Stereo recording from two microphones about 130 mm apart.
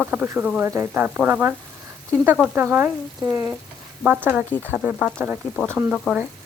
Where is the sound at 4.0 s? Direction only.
15° right (ahead or behind); by 6.1 s 5° left (ahead or behind).